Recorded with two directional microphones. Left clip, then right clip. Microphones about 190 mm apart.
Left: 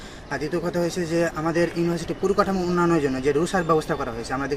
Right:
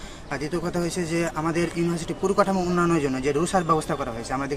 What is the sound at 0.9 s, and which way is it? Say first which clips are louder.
Speech: left 2 dB; 25° right (ahead or behind).